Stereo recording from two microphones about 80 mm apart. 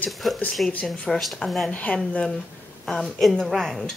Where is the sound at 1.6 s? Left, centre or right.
Centre.